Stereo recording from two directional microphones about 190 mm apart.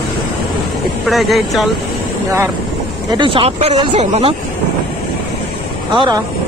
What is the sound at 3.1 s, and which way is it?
Speech, 25° right (ahead or behind).